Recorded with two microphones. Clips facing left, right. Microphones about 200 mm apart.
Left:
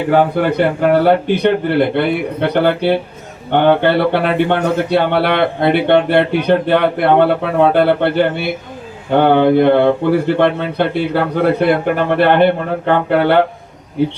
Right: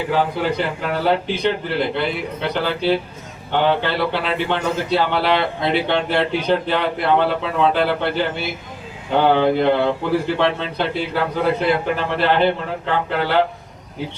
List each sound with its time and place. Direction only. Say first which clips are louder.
0.1 s speech: left 8 dB; 60° left (ahead or behind)